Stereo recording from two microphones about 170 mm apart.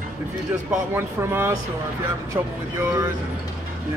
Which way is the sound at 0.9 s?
15° right (ahead or behind).